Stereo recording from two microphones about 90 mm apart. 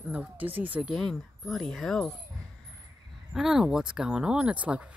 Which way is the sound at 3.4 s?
5° right (ahead or behind).